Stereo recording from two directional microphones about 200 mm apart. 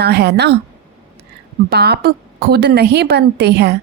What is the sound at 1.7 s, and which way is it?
Speech, 55° right (ahead or behind).